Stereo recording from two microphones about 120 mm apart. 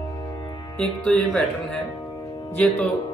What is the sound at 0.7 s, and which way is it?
Speech, 5° left (ahead or behind).